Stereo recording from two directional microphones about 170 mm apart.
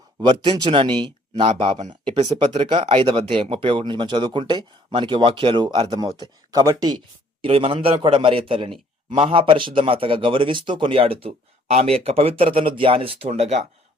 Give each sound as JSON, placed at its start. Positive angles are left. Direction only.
{"t": 0.2, "sound": "speech", "side_deg": -30}
{"t": 7.4, "sound": "a man's voice", "side_deg": -35}